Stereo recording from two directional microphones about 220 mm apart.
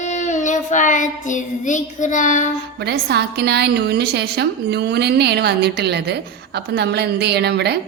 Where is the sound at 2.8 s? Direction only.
50° right (ahead or behind).